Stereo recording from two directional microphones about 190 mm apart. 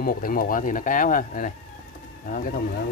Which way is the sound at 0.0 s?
50° left (ahead or behind).